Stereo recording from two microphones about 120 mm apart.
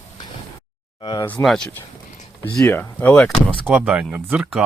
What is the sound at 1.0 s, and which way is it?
Speech, 35° left (ahead or behind).